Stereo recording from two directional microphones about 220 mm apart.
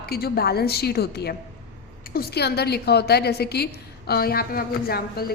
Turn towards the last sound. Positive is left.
turn(degrees=45)  # may be behind; listen again after turning